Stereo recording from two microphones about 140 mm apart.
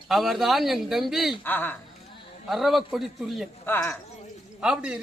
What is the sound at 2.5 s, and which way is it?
Speech, centre (ahead or behind).